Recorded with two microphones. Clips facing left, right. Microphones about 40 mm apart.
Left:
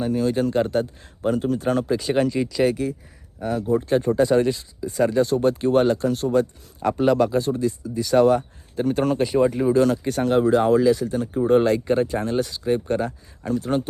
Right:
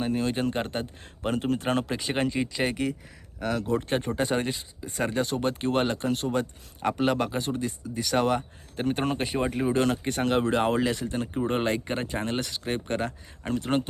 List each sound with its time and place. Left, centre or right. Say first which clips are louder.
0.0 s speech: left 5 dB; right
3.4 s speech: left 5 dB; right
3.8 s speech: left 8 dB; right
11.4 s speech: left 11 dB; right